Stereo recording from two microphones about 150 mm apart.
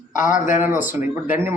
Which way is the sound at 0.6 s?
15° right (ahead or behind).